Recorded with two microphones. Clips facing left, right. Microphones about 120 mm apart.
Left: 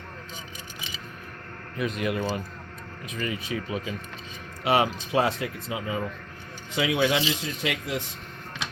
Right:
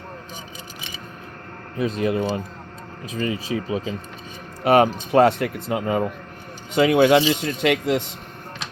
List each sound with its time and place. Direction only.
1.8 s speech: 30° right (ahead or behind)
4.6 s speech: 50° right (ahead or behind); by 8.1 s 70° right (ahead or behind)